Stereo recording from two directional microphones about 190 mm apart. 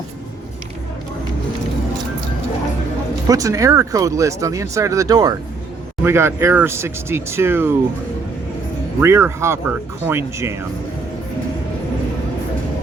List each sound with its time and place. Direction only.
3.2 s speech: 15° right (ahead or behind)
9.0 s speech: 15° right (ahead or behind)